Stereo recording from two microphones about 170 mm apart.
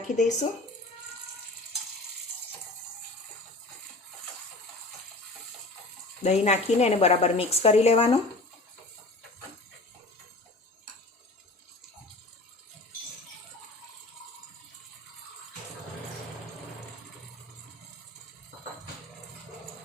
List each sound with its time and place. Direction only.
0.2 s speech: 45° left (ahead or behind)
6.2 s a woman's voice: 40° left (ahead or behind)